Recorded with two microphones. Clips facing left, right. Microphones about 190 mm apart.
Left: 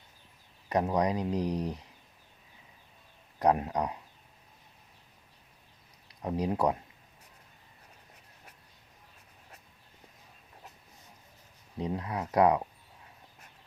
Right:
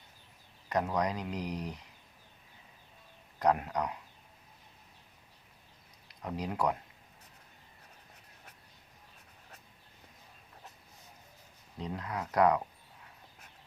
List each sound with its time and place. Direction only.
0.7 s speech: 25° left (ahead or behind)
3.3 s speech: 25° left (ahead or behind)
6.2 s speech: 25° left (ahead or behind)
11.8 s speech: 25° left (ahead or behind)